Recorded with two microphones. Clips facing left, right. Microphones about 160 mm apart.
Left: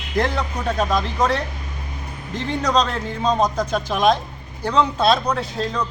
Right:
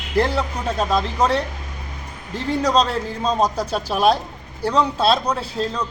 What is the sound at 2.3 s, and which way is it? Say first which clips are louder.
A man's voice: right 2 dB; 35° right (ahead or behind).